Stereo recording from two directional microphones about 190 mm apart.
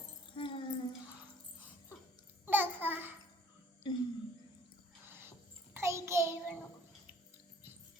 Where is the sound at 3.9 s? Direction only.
25° left (ahead or behind).